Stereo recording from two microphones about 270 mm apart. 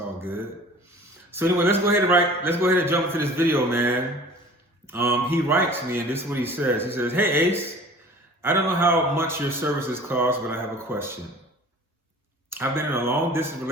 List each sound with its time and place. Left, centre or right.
0.2 s speech: centre
12.5 s speech: centre